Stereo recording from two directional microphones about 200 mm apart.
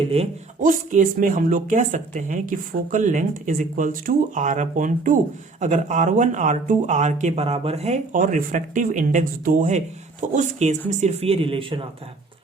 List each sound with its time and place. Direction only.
0.1 s speech: 35° right (ahead or behind)